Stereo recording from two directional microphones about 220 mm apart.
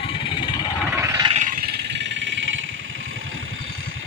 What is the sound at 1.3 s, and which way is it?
Vehicle, 35° right (ahead or behind).